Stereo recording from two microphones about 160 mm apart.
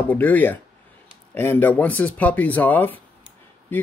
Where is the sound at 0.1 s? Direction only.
10° left (ahead or behind).